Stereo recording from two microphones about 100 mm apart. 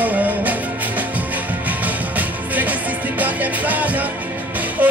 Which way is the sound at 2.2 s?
15° right (ahead or behind).